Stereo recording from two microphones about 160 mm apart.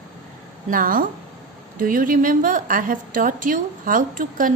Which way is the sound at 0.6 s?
60° right (ahead or behind).